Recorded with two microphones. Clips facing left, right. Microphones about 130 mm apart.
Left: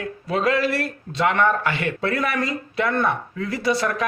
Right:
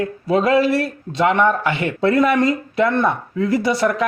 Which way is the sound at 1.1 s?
20° right (ahead or behind).